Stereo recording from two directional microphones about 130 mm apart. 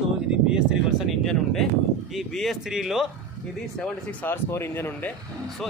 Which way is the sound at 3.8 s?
15° left (ahead or behind).